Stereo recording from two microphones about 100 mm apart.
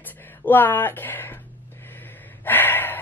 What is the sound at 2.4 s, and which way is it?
Gasp, 20° left (ahead or behind).